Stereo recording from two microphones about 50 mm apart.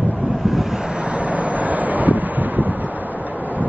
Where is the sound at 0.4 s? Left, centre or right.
Centre.